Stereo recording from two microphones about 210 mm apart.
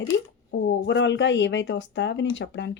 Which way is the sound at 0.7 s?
60° left (ahead or behind).